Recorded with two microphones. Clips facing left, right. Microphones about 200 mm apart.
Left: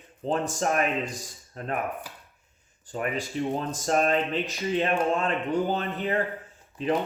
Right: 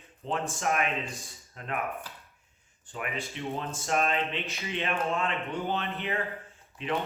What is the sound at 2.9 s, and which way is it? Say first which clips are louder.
Speech: left 7 dB; 35° left (ahead or behind).